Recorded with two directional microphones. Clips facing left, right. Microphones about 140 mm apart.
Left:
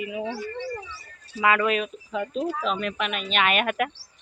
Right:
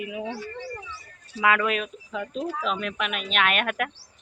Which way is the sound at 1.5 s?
Centre (ahead or behind).